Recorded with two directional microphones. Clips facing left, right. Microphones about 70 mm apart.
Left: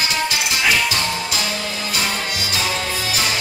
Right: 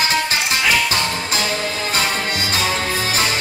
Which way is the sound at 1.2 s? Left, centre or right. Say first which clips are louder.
Right 2 dB; right.